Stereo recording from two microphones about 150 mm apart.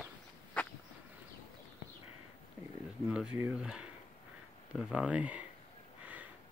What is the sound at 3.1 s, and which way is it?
Speech, 5° right (ahead or behind).